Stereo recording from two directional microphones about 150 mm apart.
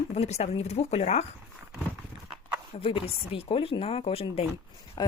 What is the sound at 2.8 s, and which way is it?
Speech, 40° left (ahead or behind).